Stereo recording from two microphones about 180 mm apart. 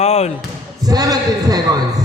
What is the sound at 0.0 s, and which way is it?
Basketball bounce, 35° left (ahead or behind).